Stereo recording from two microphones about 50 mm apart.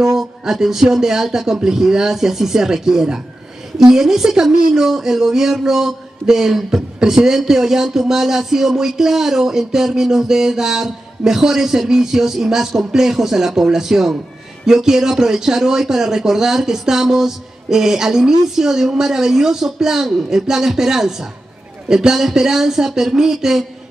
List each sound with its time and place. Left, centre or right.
0.0 s speech: centre